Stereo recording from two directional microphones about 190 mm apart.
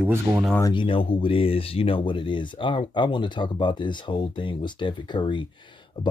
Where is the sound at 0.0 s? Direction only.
5° right (ahead or behind).